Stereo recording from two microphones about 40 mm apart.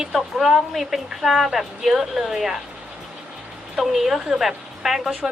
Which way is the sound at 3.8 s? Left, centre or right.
Centre.